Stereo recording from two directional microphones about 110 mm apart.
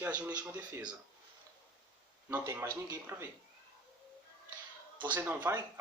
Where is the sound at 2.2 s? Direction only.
20° right (ahead or behind).